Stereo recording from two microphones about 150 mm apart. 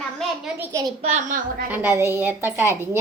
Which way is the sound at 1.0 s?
50° right (ahead or behind).